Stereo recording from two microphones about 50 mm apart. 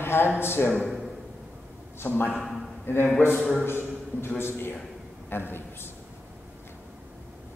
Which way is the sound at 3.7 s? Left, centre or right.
Left.